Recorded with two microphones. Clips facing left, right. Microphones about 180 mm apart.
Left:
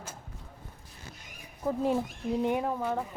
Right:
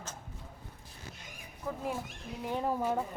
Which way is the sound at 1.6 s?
30° left (ahead or behind).